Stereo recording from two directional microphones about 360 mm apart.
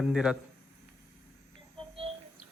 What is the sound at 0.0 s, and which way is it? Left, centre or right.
Speech, centre.